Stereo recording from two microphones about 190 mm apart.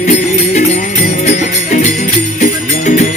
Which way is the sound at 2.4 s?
40° left (ahead or behind).